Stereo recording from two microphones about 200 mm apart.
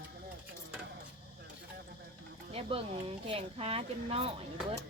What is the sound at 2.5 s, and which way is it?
Speech, 30° right (ahead or behind).